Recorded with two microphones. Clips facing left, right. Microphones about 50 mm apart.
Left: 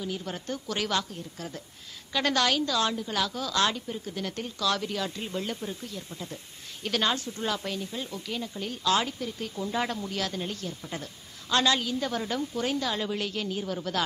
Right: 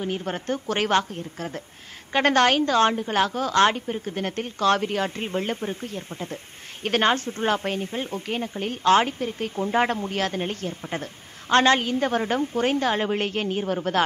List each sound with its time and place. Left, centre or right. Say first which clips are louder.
0.0 s a woman's voice: right 6 dB; right